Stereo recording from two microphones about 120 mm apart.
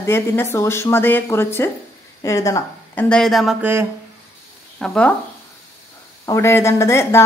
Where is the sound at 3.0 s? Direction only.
5° left (ahead or behind).